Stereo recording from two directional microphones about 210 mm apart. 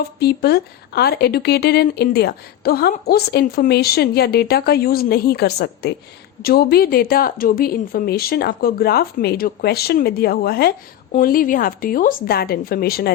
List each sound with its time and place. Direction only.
0.2 s speech: 50° left (ahead or behind)